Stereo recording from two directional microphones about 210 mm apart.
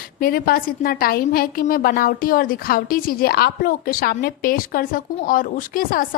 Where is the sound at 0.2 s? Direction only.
45° left (ahead or behind).